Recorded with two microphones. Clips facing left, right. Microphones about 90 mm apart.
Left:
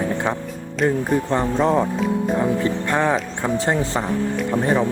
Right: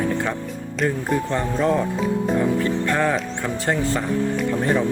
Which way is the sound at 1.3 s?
30° left (ahead or behind).